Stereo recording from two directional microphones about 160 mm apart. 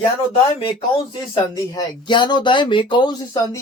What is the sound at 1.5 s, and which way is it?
Speech, 25° left (ahead or behind).